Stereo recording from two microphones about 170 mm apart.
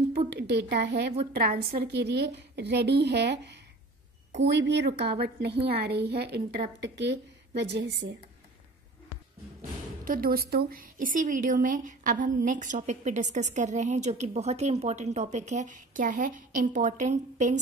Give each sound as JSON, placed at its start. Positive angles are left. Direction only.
{"t": 0.3, "sound": "a woman's voice", "side_deg": -75}
{"t": 1.3, "sound": "a woman's voice", "side_deg": -60}
{"t": 1.8, "sound": "a woman's voice", "side_deg": -75}
{"t": 4.5, "sound": "a woman's voice", "side_deg": -90}
{"t": 10.0, "sound": "a woman's voice", "side_deg": -55}